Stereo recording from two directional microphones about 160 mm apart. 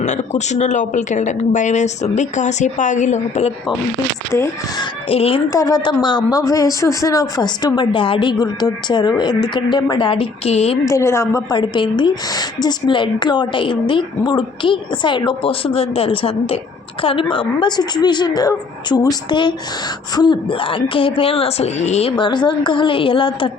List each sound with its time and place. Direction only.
0.0 s a woman's voice: 45° left (ahead or behind)
4.3 s speech: 15° left (ahead or behind)
5.0 s a woman's voice: 35° left (ahead or behind)
5.5 s a woman's voice: 20° left (ahead or behind); by 10.8 s 40° left (ahead or behind)
10.8 s a woman's voice: 20° left (ahead or behind); by 22.1 s 45° left (ahead or behind)
22.1 s a woman's voice: 30° left (ahead or behind)